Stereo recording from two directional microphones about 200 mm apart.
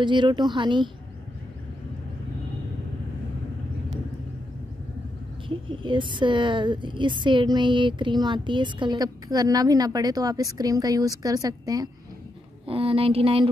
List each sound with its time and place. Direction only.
0.0 s a woman's voice: 25° right (ahead or behind)
5.5 s a woman's voice: 25° right (ahead or behind)